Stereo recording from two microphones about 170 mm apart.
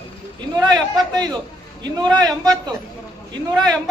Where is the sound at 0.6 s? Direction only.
25° right (ahead or behind).